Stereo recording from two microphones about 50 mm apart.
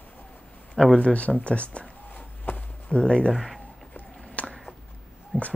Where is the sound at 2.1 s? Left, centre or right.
Left.